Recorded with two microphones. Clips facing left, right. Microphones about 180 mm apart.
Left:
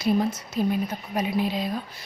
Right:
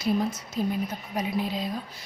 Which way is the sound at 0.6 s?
75° left (ahead or behind).